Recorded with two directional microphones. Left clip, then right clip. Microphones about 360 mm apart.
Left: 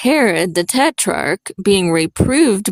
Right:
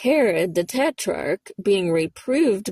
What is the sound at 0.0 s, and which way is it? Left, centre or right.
Speech, left.